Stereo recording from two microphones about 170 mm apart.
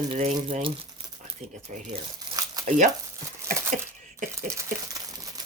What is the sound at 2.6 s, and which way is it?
Speech, 45° right (ahead or behind).